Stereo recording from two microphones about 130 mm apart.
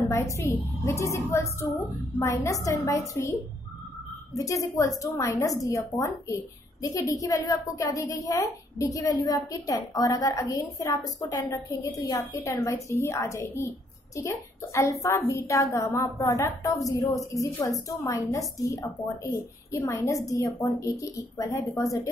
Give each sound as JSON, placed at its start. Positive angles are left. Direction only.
{"t": 0.1, "sound": "a woman's voice", "side_deg": 20}
{"t": 4.4, "sound": "a woman's voice", "side_deg": 25}